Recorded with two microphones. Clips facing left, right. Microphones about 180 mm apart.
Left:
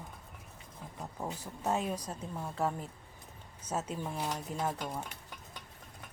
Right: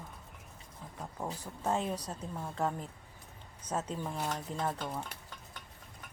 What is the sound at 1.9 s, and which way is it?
Speech, 10° left (ahead or behind).